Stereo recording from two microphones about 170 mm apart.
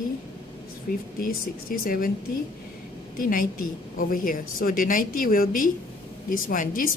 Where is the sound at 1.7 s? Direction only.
55° left (ahead or behind).